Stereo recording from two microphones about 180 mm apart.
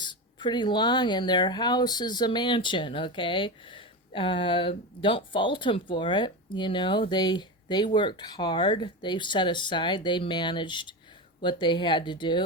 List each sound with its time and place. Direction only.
0.0 s speech: 25° left (ahead or behind)